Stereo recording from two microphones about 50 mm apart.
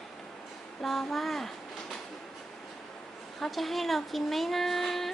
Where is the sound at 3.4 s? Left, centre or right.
Centre.